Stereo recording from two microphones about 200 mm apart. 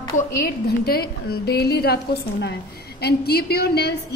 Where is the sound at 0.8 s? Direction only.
50° left (ahead or behind).